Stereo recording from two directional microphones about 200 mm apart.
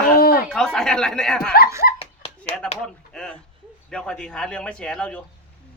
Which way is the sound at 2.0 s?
30° left (ahead or behind).